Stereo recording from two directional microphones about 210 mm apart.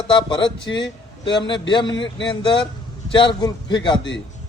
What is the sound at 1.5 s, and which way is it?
Speech, 20° left (ahead or behind).